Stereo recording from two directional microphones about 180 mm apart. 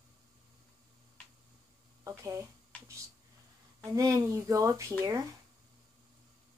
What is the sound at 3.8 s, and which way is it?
Speech, 20° right (ahead or behind).